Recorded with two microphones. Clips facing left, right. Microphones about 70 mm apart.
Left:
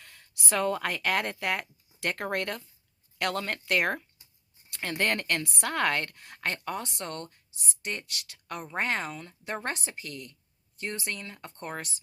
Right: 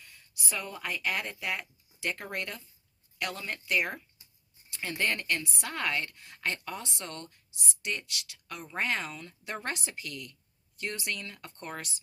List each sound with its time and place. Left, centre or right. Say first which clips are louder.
0.0 s speech: left 3 dB; left